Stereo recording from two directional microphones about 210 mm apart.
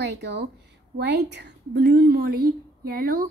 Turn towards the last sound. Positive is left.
turn(degrees=-45)  # may be behind; listen again after turning